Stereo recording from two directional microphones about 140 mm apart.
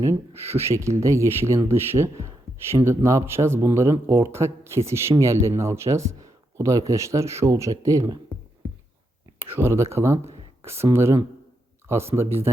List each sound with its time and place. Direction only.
0.0 s speech: 20° right (ahead or behind)
9.4 s speech: 15° right (ahead or behind)